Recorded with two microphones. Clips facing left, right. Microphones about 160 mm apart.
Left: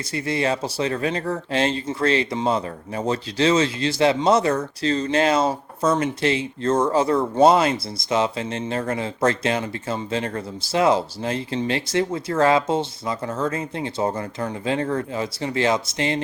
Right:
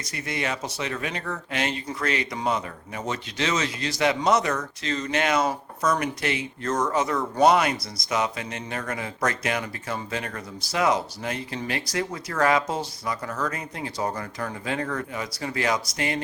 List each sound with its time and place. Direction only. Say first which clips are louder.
0.0 s speech: left 7 dB; 30° left (ahead or behind)